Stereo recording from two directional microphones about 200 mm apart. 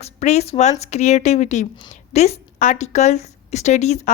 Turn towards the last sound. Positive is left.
turn(degrees=35)  # may be behind; listen again after turning